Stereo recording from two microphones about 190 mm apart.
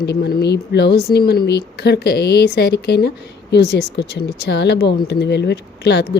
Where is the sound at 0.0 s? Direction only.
60° left (ahead or behind).